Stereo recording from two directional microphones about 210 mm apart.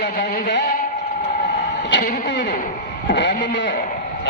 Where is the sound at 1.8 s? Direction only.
50° left (ahead or behind).